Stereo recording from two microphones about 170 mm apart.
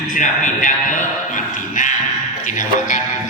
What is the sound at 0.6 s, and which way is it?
Sheep, 50° left (ahead or behind).